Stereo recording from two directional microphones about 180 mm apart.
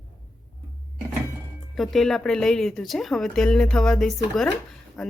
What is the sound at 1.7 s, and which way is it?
Speech, centre (ahead or behind).